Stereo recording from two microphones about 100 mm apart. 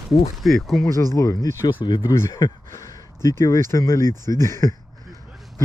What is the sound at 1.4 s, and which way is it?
Speech, 25° left (ahead or behind).